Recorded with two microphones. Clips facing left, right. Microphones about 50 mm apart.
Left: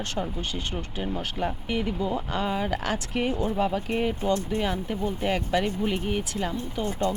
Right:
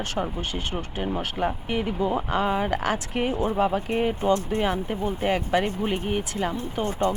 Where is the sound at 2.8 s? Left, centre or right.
Centre.